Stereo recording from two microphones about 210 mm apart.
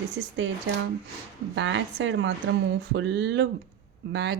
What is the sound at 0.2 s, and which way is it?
Speech, 70° right (ahead or behind).